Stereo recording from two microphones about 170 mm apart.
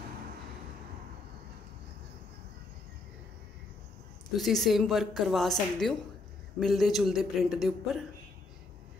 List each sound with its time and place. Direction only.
4.4 s a woman's voice: centre (ahead or behind)